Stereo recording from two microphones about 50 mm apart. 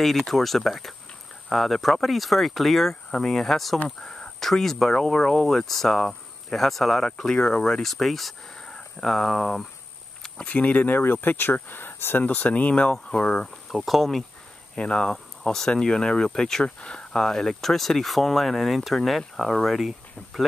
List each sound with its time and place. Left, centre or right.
0.0 s speech: centre
4.0 s speech: centre
7.1 s speech: centre
7.8 s speech: centre
10.4 s speech: left
13.7 s speech: centre
14.8 s speech: centre
16.6 s speech: left; by 19.9 s centre